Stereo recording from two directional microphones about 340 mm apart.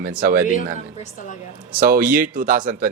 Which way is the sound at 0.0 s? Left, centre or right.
Right.